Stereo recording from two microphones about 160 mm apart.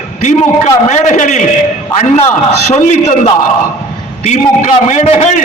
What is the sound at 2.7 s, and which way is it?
Speech, 50° left (ahead or behind).